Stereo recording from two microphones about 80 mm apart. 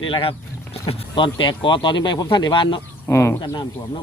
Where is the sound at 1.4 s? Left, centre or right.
Left.